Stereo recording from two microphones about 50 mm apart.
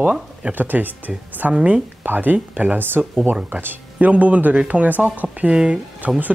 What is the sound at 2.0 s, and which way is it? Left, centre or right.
Speech, right.